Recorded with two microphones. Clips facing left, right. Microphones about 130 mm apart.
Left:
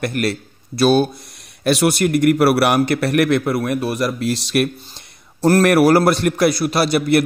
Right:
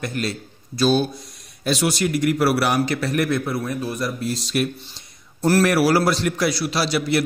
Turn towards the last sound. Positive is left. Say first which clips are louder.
# left 5 dB
turn(degrees=55)  # may be behind; listen again after turning